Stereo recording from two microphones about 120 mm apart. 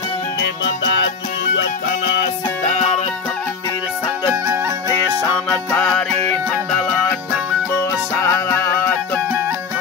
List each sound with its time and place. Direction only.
2.6 s music: 65° left (ahead or behind)
5.8 s music: 10° left (ahead or behind)
8.2 s music: 25° left (ahead or behind)